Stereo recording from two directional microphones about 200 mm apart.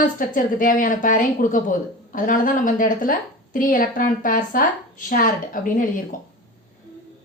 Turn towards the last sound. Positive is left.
turn(degrees=40)  # may be behind; listen again after turning